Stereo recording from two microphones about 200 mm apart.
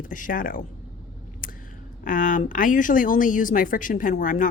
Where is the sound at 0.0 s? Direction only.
40° left (ahead or behind).